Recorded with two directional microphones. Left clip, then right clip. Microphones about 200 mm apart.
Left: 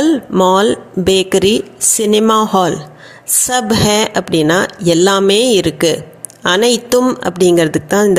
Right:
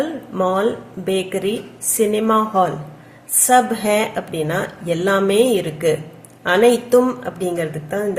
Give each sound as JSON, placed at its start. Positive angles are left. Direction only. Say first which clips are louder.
{"t": 0.0, "sound": "a woman's voice", "louder": "left 9 dB", "side_deg": 45}